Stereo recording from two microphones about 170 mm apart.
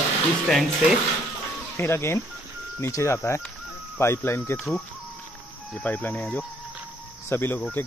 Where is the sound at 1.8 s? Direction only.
15° left (ahead or behind).